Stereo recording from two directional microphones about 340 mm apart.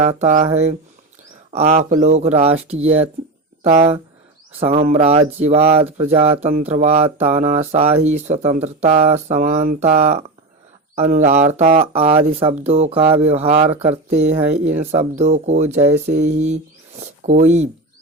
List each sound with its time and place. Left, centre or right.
0.0 s speech: centre